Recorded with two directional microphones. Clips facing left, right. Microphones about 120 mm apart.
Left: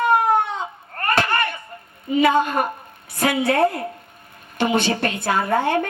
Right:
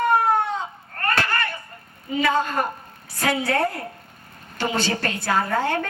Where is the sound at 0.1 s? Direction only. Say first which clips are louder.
Left 2 dB; 20° left (ahead or behind).